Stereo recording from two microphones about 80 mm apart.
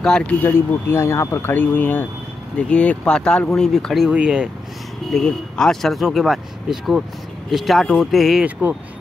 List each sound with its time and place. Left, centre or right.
0.0 s speech: centre
0.4 s speech: left; by 4.1 s centre
4.1 s speech: centre
5.1 s speech: centre
8.5 s speech: centre